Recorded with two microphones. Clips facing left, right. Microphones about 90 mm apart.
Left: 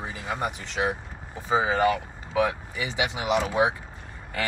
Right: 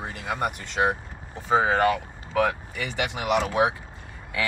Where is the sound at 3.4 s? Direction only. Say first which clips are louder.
Right 1 dB; centre (ahead or behind).